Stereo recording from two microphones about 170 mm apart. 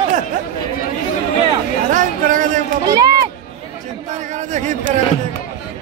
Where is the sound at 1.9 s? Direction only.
50° right (ahead or behind).